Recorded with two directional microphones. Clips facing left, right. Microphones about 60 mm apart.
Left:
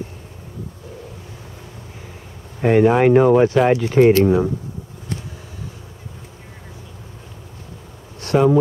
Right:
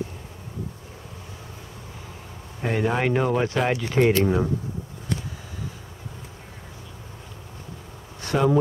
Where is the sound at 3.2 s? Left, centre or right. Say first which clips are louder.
Left 10 dB; centre.